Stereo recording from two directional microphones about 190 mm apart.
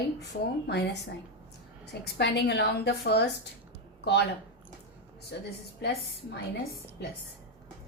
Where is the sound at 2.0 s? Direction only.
65° left (ahead or behind).